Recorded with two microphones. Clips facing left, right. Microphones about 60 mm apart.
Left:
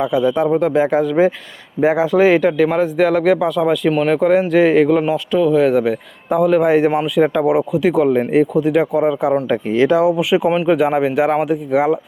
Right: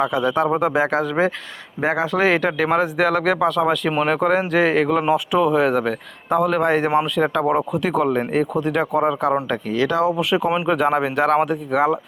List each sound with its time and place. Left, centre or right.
0.0 s speech: centre
9.6 s speech: left
10.0 s speech: centre